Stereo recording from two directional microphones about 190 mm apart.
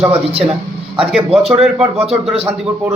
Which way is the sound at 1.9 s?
30° right (ahead or behind).